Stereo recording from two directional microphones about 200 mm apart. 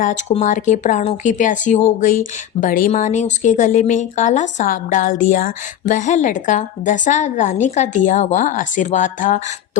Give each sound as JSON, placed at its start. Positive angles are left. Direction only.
{"t": 0.0, "sound": "speech", "side_deg": 35}